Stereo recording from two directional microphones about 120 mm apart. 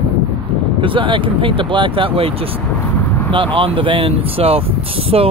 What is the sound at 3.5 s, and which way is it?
Speech, 50° right (ahead or behind).